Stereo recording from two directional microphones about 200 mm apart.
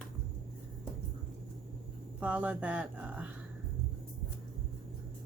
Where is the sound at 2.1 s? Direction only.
5° right (ahead or behind).